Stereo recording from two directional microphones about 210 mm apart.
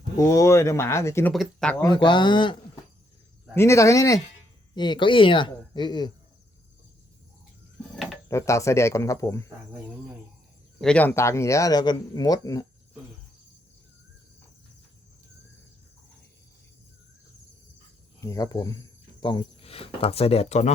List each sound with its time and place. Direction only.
0.2 s speech: 15° left (ahead or behind)
1.3 s speech: centre (ahead or behind)
1.8 s speech: 20° left (ahead or behind)
8.3 s speech: 15° left (ahead or behind)
10.8 s speech: 5° left (ahead or behind)
18.2 s speech: 15° left (ahead or behind); by 20.7 s 30° left (ahead or behind)